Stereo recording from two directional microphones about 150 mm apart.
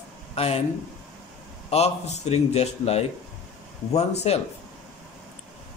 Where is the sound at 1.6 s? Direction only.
45° left (ahead or behind).